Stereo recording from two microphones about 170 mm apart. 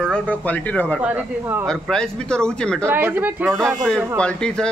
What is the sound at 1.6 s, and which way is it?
A man's voice, 5° left (ahead or behind).